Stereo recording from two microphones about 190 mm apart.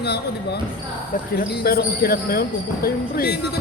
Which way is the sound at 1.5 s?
55° left (ahead or behind).